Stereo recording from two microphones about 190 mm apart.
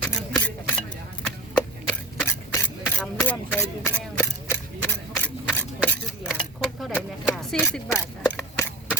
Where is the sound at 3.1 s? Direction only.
10° left (ahead or behind).